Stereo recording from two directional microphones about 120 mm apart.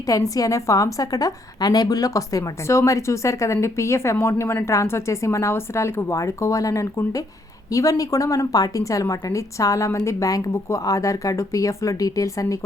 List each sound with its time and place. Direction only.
0.0 s a woman's voice: 30° left (ahead or behind)